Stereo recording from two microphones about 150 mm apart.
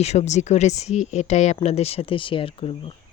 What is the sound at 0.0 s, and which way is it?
Speech, 45° left (ahead or behind).